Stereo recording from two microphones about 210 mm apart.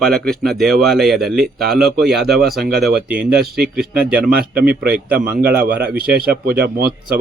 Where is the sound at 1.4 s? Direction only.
50° right (ahead or behind).